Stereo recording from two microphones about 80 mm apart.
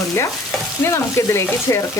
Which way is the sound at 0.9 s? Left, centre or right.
Left.